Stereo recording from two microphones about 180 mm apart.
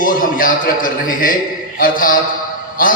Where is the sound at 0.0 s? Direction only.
50° left (ahead or behind).